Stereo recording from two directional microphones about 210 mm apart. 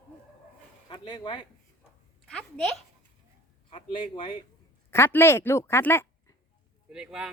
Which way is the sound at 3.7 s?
25° left (ahead or behind).